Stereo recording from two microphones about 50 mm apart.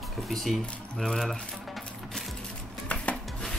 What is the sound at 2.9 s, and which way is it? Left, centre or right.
Rub, left.